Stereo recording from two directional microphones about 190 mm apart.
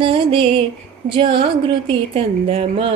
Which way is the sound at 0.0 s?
30° right (ahead or behind).